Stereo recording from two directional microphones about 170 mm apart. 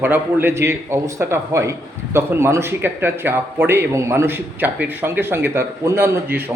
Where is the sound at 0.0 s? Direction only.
10° right (ahead or behind).